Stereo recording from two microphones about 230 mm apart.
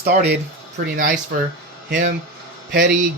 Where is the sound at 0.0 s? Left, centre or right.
Right.